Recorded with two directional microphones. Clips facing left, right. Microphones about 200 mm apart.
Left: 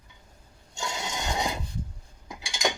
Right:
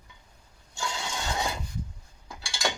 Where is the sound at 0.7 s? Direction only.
20° left (ahead or behind).